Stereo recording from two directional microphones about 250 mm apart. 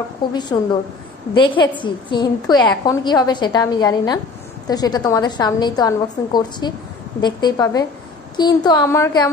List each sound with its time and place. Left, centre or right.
0.3 s a woman's voice: centre